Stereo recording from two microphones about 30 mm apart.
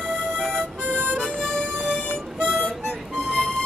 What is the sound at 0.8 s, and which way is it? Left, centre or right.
Harmonica, right.